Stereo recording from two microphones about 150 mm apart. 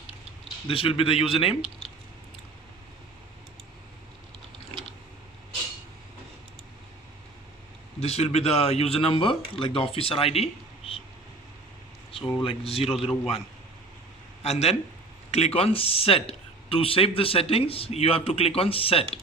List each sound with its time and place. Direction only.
0.7 s speech: 35° left (ahead or behind)
7.9 s speech: 45° left (ahead or behind)
12.1 s speech: 40° left (ahead or behind)
14.4 s speech: 45° left (ahead or behind)